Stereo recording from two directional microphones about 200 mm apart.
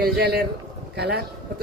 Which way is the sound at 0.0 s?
50° right (ahead or behind).